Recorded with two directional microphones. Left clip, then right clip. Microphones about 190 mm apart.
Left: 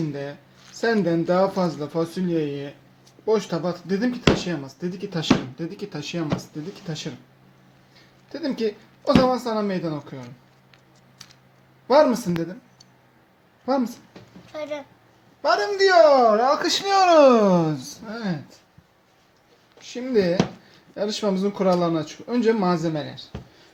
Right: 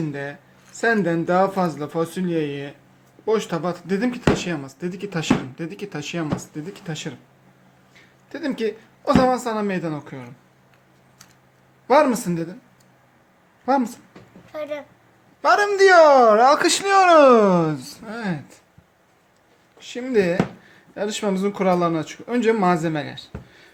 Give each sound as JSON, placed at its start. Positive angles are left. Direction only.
{"t": 0.1, "sound": "speech", "side_deg": 0}
{"t": 8.3, "sound": "speech", "side_deg": -5}
{"t": 11.9, "sound": "a woman's voice", "side_deg": -5}
{"t": 14.5, "sound": "speech", "side_deg": -25}
{"t": 16.9, "sound": "speech", "side_deg": 0}
{"t": 17.9, "sound": "speech", "side_deg": -20}
{"t": 19.9, "sound": "speech", "side_deg": 0}